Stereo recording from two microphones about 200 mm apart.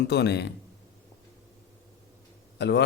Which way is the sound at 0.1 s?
55° left (ahead or behind).